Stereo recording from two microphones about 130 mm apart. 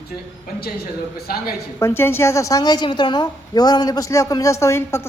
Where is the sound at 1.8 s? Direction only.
20° left (ahead or behind).